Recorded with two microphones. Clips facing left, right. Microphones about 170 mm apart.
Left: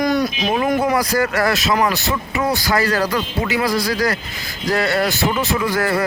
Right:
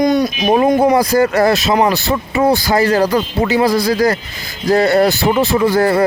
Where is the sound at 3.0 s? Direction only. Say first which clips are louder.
Right 6 dB; 30° right (ahead or behind).